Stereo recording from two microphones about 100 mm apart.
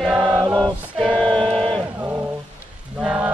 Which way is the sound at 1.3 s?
5° left (ahead or behind).